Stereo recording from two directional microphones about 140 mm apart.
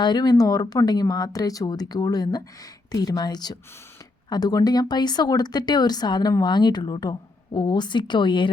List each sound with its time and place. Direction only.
0.0 s speech: 30° left (ahead or behind)